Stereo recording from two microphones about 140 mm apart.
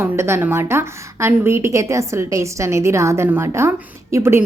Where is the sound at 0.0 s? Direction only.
15° right (ahead or behind).